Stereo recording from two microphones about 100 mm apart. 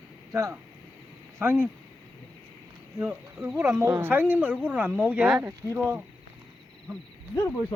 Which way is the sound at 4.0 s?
20° right (ahead or behind).